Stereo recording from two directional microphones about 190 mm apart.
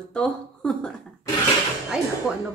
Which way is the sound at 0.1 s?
5° left (ahead or behind).